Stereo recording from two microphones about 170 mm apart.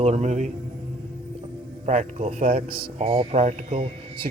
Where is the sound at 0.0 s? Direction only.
45° right (ahead or behind).